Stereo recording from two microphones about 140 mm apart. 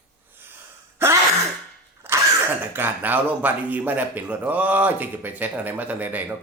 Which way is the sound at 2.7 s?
15° right (ahead or behind).